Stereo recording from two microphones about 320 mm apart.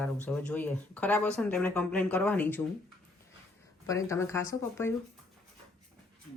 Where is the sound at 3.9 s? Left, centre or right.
Centre.